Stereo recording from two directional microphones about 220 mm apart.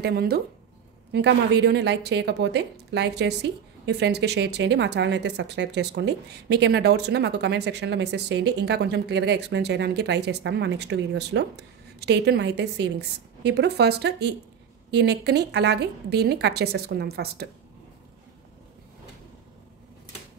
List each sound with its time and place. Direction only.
0.0 s a woman's voice: 45° right (ahead or behind)